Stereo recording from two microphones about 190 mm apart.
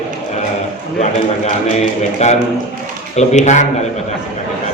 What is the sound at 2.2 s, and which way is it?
A man's voice, 35° left (ahead or behind).